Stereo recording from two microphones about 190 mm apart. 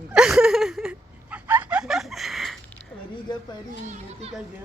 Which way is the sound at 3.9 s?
35° right (ahead or behind).